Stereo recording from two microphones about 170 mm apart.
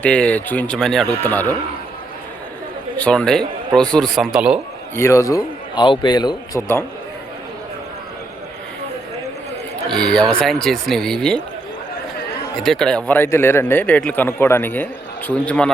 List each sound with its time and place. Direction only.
0.0 s a man's voice: 10° left (ahead or behind)
3.0 s speech: 5° left (ahead or behind)
4.9 s a man's voice: 15° left (ahead or behind)
9.9 s speech: 5° left (ahead or behind)
12.5 s speech: centre (ahead or behind)
13.1 s a man's voice: 15° left (ahead or behind)